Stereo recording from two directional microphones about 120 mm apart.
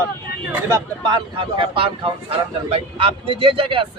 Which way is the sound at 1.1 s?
45° right (ahead or behind).